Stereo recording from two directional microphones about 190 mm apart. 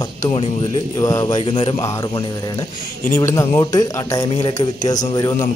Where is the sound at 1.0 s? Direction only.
20° left (ahead or behind).